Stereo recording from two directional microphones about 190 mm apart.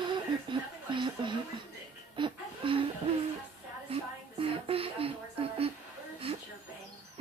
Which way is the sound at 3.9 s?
30° right (ahead or behind).